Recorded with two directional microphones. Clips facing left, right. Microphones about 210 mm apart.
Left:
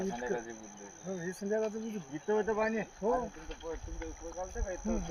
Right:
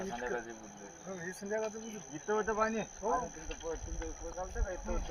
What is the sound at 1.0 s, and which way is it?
Speech, 25° left (ahead or behind).